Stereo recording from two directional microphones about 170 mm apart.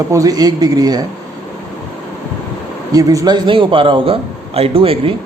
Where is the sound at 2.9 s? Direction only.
20° right (ahead or behind).